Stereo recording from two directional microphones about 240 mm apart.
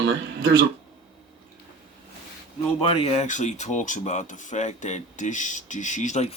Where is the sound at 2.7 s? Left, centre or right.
Left.